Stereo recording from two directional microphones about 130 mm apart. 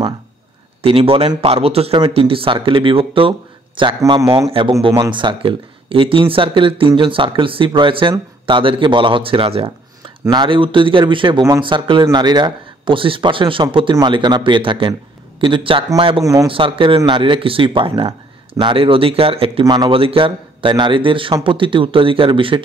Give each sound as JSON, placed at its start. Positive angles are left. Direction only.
{"t": 0.8, "sound": "speech", "side_deg": -45}
{"t": 19.6, "sound": "speech", "side_deg": -30}
{"t": 19.9, "sound": "speech", "side_deg": -45}